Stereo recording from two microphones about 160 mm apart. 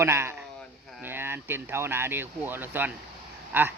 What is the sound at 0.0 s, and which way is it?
Speech, 15° right (ahead or behind).